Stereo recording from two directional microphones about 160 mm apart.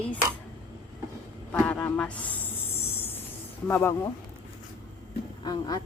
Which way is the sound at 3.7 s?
15° left (ahead or behind).